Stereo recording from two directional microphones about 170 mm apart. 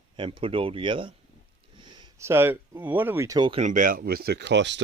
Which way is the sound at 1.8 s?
25° right (ahead or behind).